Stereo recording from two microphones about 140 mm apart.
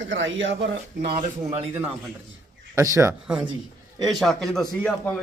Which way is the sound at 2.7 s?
20° right (ahead or behind).